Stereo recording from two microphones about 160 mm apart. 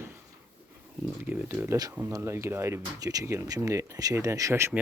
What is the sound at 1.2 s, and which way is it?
Speech, 10° right (ahead or behind).